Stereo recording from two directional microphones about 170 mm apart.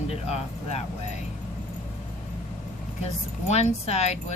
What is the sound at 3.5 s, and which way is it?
Speech, 40° left (ahead or behind).